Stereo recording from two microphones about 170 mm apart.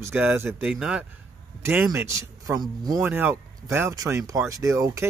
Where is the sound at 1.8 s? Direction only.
15° right (ahead or behind).